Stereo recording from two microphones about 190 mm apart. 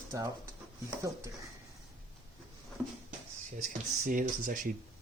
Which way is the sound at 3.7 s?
45° right (ahead or behind).